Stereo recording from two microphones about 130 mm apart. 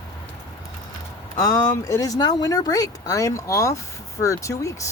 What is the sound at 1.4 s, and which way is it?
Speech, 25° left (ahead or behind).